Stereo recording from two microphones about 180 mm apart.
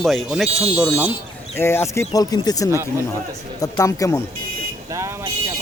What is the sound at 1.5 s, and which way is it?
Speech, 15° left (ahead or behind).